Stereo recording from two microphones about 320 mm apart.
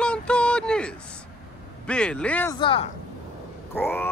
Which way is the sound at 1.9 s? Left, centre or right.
Centre.